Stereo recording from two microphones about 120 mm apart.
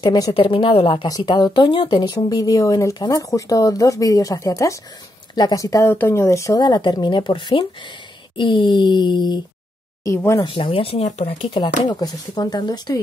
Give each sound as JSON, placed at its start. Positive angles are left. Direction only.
{"t": 0.0, "sound": "speech", "side_deg": 35}
{"t": 0.3, "sound": "a woman's voice", "side_deg": 50}
{"t": 1.0, "sound": "speech", "side_deg": 35}
{"t": 6.6, "sound": "speech", "side_deg": 40}
{"t": 10.0, "sound": "speech", "side_deg": 25}
{"t": 10.4, "sound": "a woman's voice", "side_deg": 40}
{"t": 11.2, "sound": "speech", "side_deg": 40}